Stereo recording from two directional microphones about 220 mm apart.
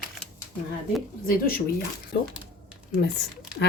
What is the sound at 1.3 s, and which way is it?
Speech, 40° left (ahead or behind).